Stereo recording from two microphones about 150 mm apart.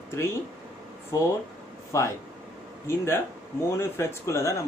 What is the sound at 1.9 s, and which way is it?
Speech, 20° left (ahead or behind).